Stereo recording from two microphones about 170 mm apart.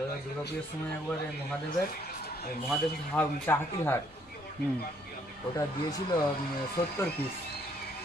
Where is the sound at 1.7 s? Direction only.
60° left (ahead or behind).